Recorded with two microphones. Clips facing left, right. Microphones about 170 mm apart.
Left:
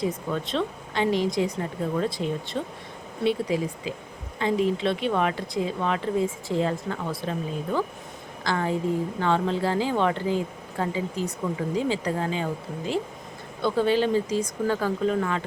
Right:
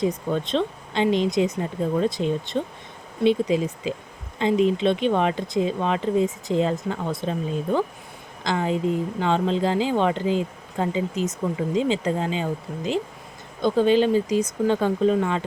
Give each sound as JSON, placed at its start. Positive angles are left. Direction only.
{"t": 0.3, "sound": "speech", "side_deg": -25}